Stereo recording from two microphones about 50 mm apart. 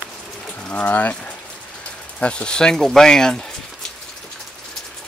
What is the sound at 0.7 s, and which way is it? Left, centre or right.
Speech, left.